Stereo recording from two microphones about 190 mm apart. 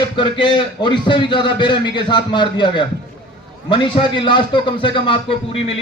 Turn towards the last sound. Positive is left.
turn(degrees=30)  # may be behind; listen again after turning